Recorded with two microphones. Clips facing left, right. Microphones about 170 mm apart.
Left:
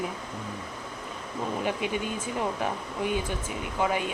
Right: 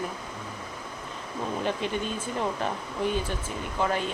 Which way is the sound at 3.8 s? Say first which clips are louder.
Even; 10° left (ahead or behind).